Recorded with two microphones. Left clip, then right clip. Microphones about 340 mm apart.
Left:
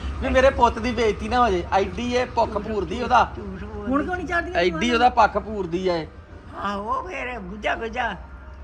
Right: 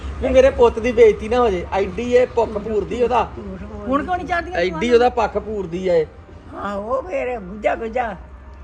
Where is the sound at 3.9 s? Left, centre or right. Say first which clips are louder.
Right 4 dB; right.